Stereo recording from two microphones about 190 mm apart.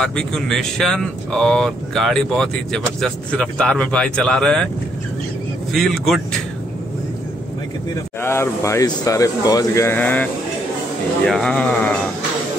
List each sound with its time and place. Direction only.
0.0 s speech: 5° left (ahead or behind)
5.7 s speech: centre (ahead or behind)
8.2 s speech: 15° left (ahead or behind)